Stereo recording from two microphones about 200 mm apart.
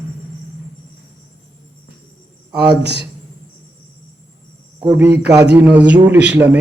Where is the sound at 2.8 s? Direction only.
55° right (ahead or behind).